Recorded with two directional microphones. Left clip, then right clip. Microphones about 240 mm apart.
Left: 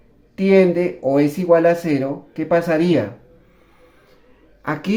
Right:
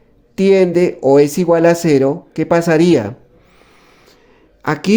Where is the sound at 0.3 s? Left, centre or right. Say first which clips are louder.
Right 3 dB; right.